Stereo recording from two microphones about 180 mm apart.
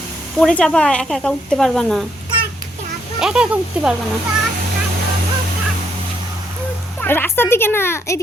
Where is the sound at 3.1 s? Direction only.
5° right (ahead or behind).